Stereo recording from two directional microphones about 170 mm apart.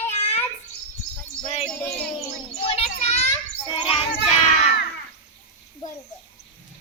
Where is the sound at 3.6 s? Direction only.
30° left (ahead or behind).